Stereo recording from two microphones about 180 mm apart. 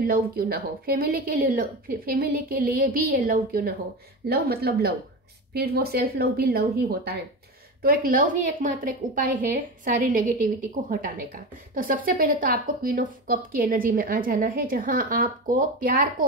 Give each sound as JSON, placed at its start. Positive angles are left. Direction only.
{"t": 0.0, "sound": "a woman's voice", "side_deg": -55}